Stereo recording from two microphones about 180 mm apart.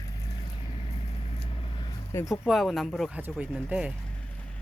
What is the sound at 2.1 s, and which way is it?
Speech, 15° left (ahead or behind).